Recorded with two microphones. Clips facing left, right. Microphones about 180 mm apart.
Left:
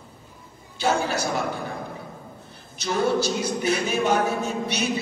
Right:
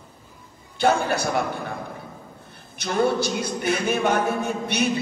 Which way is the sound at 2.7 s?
55° right (ahead or behind).